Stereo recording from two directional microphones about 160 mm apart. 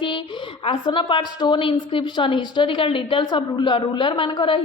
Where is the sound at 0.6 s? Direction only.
30° left (ahead or behind).